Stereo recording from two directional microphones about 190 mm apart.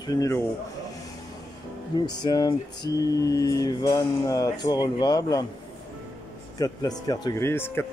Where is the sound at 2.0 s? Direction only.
20° left (ahead or behind).